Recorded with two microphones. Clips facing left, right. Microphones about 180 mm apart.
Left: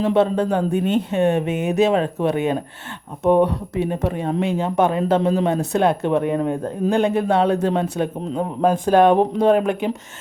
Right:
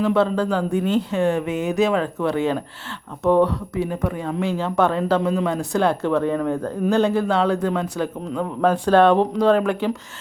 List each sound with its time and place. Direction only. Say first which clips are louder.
0.0 s speech: left 1 dB; 20° left (ahead or behind)